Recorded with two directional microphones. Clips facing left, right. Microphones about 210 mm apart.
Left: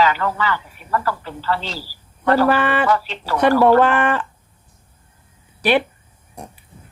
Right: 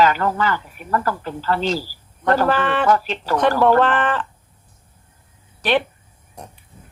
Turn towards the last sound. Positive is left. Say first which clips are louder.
# left 2 dB
turn(degrees=10)  # may be behind; listen again after turning